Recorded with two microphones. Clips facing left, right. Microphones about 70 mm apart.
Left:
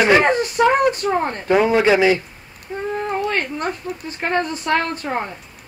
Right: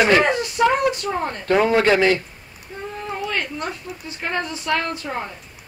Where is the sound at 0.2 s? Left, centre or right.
Left.